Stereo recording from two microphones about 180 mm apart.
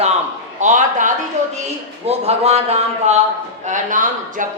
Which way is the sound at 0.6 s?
45° right (ahead or behind).